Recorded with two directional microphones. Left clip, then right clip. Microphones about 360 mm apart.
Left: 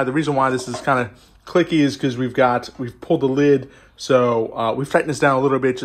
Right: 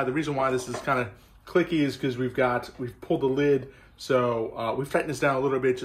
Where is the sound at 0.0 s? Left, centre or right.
Centre.